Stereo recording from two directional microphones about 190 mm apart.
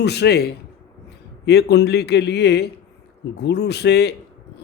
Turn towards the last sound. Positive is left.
turn(degrees=60)  # may be behind; listen again after turning